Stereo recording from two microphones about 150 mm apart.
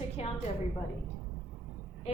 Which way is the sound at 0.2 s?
45° left (ahead or behind).